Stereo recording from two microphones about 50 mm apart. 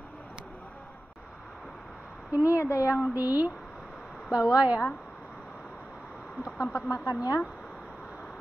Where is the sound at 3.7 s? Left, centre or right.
Centre.